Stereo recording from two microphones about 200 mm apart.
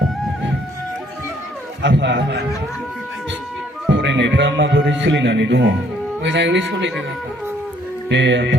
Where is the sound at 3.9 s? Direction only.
60° right (ahead or behind).